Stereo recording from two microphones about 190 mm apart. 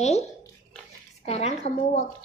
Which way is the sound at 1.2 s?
35° left (ahead or behind).